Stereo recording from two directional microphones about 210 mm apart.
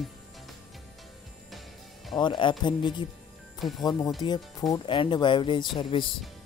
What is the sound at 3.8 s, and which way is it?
Speech, 20° left (ahead or behind).